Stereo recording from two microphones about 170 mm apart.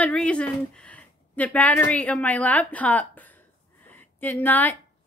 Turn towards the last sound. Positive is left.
turn(degrees=10)  # may be behind; listen again after turning